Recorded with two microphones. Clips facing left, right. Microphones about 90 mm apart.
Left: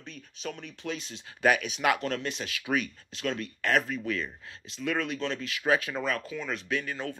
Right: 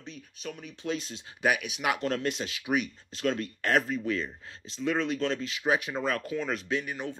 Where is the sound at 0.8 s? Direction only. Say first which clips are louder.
Right 6 dB; 35° right (ahead or behind).